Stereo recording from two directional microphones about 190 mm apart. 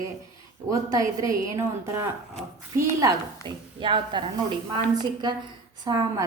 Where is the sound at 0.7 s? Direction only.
20° right (ahead or behind).